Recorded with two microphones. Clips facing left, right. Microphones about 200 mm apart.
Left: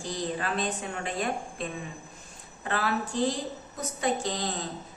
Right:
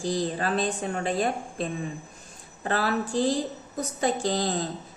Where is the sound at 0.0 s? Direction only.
35° right (ahead or behind).